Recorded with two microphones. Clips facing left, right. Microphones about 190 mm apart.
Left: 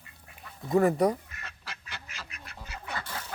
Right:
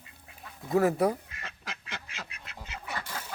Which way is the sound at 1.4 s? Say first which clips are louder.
Right 3 dB; 25° right (ahead or behind).